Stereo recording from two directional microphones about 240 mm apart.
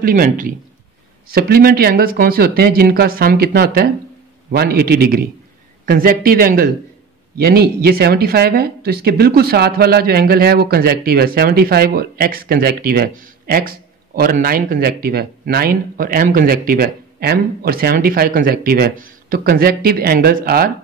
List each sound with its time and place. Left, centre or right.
0.0 s speech: right